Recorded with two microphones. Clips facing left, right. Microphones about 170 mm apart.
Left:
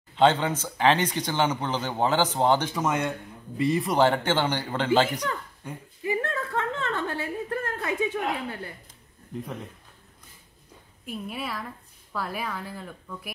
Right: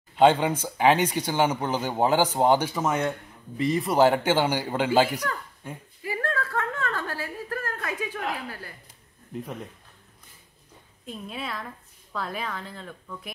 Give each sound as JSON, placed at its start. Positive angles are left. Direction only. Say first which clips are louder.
{"t": 0.1, "sound": "speech", "louder": "right 2 dB", "side_deg": -10}
{"t": 6.0, "sound": "a sound", "louder": "left 1 dB", "side_deg": 20}
{"t": 11.1, "sound": "speech", "louder": "left 1 dB", "side_deg": 5}